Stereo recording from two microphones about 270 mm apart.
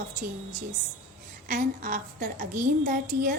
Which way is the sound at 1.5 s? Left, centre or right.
Right.